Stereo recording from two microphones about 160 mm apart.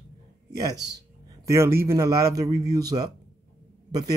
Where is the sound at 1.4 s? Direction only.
15° right (ahead or behind).